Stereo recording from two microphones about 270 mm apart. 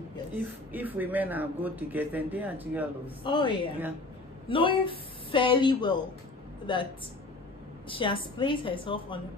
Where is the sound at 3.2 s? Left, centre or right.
Centre.